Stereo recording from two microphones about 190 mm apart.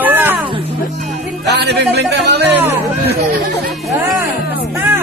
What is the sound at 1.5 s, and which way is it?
Speech, 60° right (ahead or behind).